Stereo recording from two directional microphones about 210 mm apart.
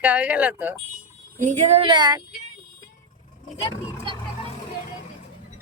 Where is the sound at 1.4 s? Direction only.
35° right (ahead or behind).